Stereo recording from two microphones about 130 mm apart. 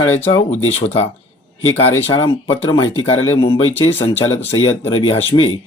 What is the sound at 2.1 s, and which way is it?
Speech, 40° left (ahead or behind).